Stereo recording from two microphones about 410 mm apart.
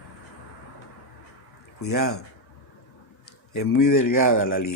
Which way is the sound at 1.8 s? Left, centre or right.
Left.